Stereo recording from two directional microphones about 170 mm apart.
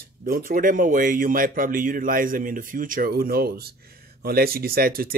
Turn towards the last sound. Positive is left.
turn(degrees=-60)  # may be behind; listen again after turning